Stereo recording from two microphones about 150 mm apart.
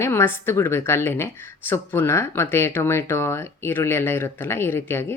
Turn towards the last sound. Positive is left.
turn(degrees=15)  # may be behind; listen again after turning